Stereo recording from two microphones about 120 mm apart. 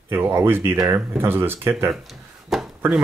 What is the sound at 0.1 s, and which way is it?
Speech, 20° right (ahead or behind).